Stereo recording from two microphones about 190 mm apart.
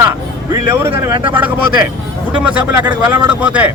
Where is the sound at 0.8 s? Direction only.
10° right (ahead or behind).